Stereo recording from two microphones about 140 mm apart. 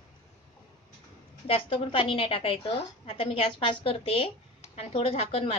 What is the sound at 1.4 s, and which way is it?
A woman's voice, 40° left (ahead or behind).